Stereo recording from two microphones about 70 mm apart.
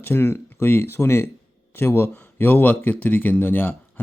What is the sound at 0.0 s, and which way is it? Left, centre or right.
Speech, left.